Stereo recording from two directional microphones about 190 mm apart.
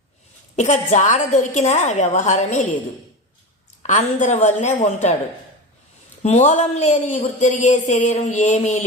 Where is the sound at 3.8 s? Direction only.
40° left (ahead or behind).